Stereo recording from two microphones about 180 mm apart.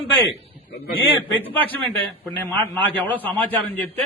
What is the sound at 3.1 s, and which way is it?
Speech, 10° left (ahead or behind).